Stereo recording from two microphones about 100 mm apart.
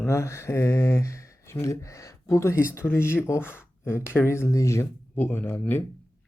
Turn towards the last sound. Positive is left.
turn(degrees=20)  # may be behind; listen again after turning